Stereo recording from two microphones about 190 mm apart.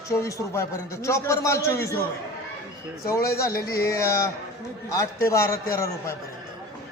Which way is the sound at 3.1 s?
15° left (ahead or behind).